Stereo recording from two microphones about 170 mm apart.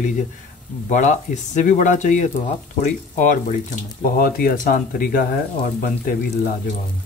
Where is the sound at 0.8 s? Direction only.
45° left (ahead or behind).